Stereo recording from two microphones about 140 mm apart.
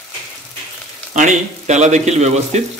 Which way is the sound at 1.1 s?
60° right (ahead or behind).